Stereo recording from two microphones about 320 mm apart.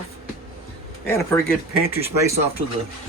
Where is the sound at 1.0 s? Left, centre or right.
Centre.